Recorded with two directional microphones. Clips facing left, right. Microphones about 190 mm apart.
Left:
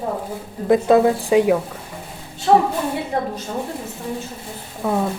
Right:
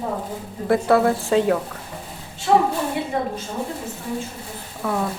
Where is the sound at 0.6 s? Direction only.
20° left (ahead or behind).